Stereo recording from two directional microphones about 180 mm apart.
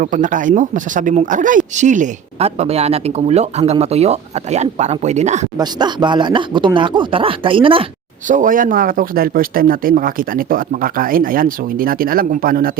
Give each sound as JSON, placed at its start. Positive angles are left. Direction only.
{"t": 0.0, "sound": "speech", "side_deg": -45}
{"t": 5.5, "sound": "speech", "side_deg": -25}
{"t": 8.3, "sound": "speech", "side_deg": -45}